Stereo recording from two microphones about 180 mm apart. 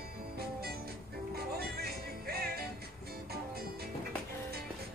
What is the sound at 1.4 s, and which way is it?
Music, 60° right (ahead or behind).